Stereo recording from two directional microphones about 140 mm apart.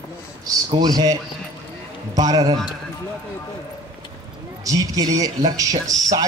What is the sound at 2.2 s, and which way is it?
Speech, 25° right (ahead or behind).